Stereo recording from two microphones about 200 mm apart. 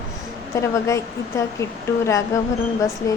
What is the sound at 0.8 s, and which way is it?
Speech, 15° left (ahead or behind).